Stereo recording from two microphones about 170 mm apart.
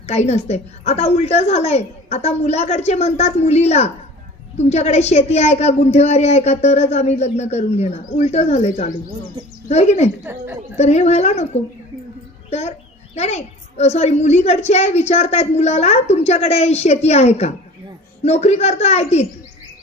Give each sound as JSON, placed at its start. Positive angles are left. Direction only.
{"t": 0.0, "sound": "a woman's voice", "side_deg": 40}
{"t": 10.2, "sound": "a woman's voice", "side_deg": -10}
{"t": 10.8, "sound": "a woman's voice", "side_deg": 40}
{"t": 12.4, "sound": "a woman's voice", "side_deg": 40}